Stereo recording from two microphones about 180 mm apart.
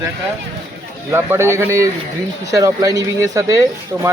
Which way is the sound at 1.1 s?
15° right (ahead or behind).